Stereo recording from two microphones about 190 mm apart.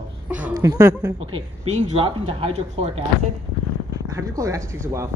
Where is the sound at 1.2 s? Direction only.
35° right (ahead or behind).